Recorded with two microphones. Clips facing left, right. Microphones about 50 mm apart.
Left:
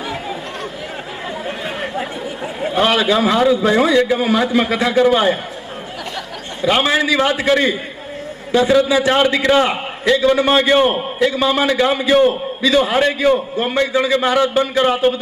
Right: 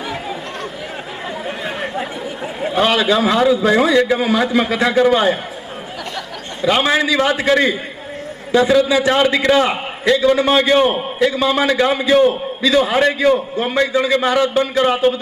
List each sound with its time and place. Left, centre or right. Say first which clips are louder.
1.5 s a sound: right 1 dB; centre
2.8 s a man's voice: even; centre
6.6 s a man's voice: even; centre
6.8 s a man's voice: even; centre